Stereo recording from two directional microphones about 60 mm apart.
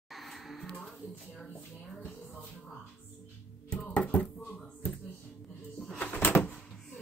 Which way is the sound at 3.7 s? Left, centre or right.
Centre.